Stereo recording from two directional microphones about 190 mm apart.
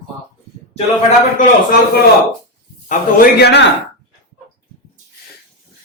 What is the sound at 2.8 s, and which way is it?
Speech, 55° left (ahead or behind).